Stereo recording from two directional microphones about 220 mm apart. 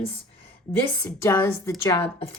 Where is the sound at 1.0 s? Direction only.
10° left (ahead or behind).